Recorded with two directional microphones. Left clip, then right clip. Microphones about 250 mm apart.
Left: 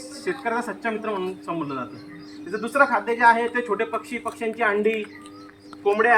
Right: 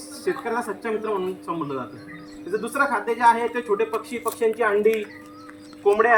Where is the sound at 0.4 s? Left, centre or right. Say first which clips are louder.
Left 1 dB; centre.